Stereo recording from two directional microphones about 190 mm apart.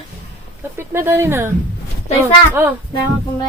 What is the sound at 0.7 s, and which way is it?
Speech, 10° right (ahead or behind).